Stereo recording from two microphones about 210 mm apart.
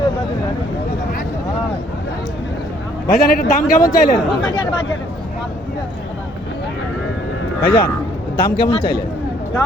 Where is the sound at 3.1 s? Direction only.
40° left (ahead or behind).